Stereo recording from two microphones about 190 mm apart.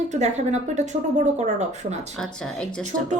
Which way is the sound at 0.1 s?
35° right (ahead or behind).